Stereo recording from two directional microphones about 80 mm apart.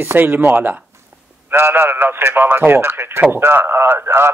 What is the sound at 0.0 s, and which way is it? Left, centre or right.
A man's voice, right.